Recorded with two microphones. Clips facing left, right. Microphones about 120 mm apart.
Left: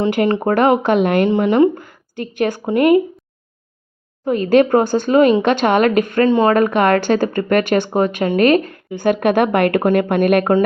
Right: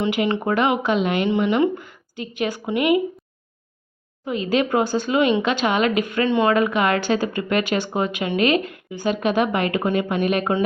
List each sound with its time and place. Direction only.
0.0 s speech: 45° left (ahead or behind)
4.3 s speech: 50° left (ahead or behind)
9.0 s speech: 55° left (ahead or behind)